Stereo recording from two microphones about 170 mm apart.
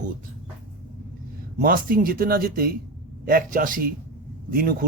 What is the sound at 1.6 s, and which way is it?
A man's voice, 60° right (ahead or behind).